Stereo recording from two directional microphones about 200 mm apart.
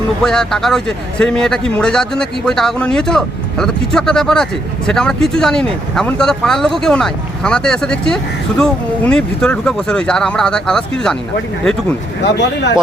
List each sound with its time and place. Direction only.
0.2 s speech: centre (ahead or behind)
12.2 s speech: 60° left (ahead or behind)